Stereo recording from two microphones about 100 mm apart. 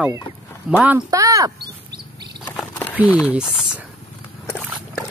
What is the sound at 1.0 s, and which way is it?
Speech, 35° right (ahead or behind).